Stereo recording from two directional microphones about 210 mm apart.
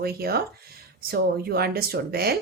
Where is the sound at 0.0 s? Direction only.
45° right (ahead or behind).